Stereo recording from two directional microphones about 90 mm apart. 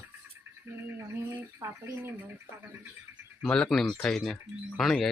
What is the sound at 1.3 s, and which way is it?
Speech, 25° right (ahead or behind).